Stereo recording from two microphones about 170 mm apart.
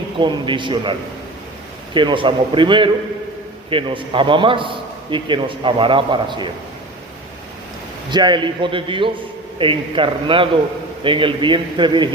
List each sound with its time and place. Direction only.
0.2 s a man's voice: 30° right (ahead or behind)
8.1 s a man's voice: 25° right (ahead or behind)